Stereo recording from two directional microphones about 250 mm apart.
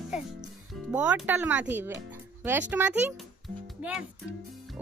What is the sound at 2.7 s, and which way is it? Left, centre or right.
Speech, centre.